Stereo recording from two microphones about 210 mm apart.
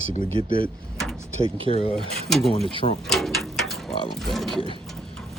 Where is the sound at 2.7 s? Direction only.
30° left (ahead or behind).